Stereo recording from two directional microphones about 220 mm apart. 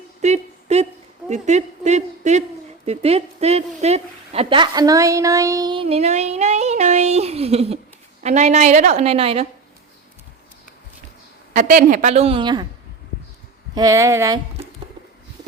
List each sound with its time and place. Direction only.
0.2 s a sound: 30° right (ahead or behind)
1.3 s a woman's voice: 30° right (ahead or behind)
11.5 s a woman's voice: 35° right (ahead or behind); by 12.6 s 20° right (ahead or behind)
13.7 s speech: 15° right (ahead or behind)